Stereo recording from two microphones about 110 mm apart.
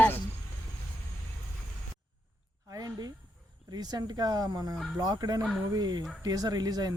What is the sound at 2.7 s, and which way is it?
Speech, 30° right (ahead or behind).